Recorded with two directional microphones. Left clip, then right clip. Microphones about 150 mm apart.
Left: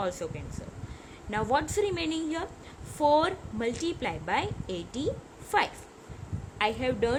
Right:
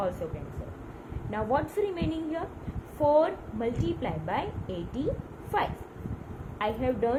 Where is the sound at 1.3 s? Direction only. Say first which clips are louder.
Left 1 dB; 65° left (ahead or behind).